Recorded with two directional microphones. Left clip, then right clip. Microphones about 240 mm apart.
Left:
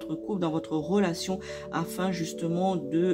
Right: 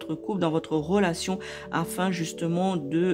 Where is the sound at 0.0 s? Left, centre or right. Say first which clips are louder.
Right 3 dB; right.